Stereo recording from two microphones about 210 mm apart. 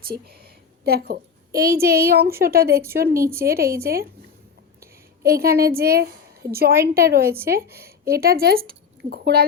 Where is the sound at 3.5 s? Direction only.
45° right (ahead or behind).